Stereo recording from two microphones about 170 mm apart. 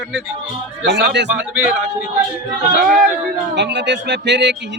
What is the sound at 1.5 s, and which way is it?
Speech, 5° right (ahead or behind).